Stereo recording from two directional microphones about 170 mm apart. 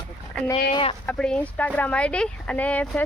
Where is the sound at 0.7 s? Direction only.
30° left (ahead or behind).